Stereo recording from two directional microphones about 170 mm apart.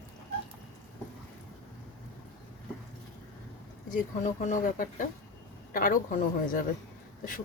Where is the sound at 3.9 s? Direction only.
50° left (ahead or behind).